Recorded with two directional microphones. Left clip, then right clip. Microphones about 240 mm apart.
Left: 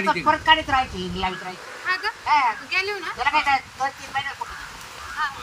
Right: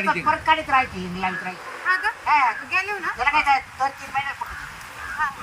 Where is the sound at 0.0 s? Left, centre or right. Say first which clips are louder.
Left 1 dB; centre.